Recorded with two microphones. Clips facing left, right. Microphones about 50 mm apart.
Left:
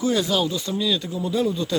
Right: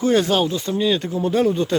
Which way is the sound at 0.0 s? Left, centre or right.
Right.